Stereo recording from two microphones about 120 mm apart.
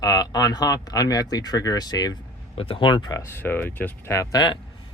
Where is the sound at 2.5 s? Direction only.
50° left (ahead or behind); by 3.2 s 35° left (ahead or behind).